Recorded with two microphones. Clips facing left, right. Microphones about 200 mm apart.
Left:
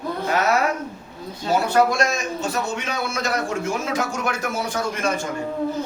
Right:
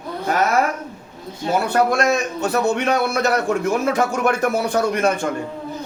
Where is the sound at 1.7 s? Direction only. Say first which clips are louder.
Right 3 dB; 60° right (ahead or behind).